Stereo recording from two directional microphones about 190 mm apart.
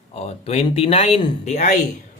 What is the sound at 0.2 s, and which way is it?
Speech, 35° left (ahead or behind).